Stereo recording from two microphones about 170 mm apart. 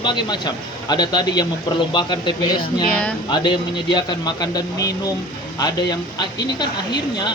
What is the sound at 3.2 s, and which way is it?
Speech, 25° left (ahead or behind).